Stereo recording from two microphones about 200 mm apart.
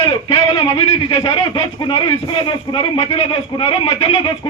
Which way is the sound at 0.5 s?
30° left (ahead or behind).